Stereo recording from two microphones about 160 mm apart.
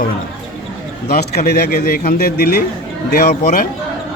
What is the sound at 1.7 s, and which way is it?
A man's voice, 65° left (ahead or behind).